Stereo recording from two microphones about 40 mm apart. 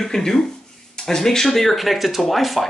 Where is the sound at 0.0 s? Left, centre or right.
Centre.